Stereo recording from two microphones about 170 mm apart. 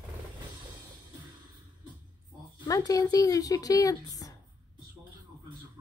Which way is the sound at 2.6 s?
20° left (ahead or behind).